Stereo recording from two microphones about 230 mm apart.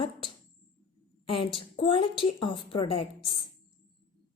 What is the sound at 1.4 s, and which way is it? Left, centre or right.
A woman's voice, left.